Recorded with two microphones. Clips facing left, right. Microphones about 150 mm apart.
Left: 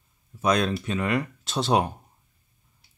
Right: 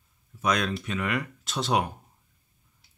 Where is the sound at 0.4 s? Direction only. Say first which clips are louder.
Left 4 dB; 30° left (ahead or behind).